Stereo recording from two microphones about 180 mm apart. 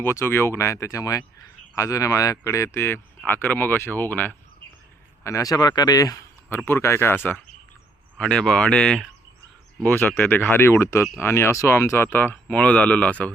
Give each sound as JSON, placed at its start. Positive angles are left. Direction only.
{"t": 0.0, "sound": "speech", "side_deg": 15}